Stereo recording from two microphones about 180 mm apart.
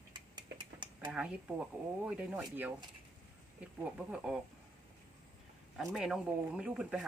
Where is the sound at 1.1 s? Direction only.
5° right (ahead or behind).